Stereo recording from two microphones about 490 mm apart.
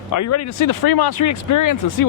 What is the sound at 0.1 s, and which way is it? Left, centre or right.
Speech, left.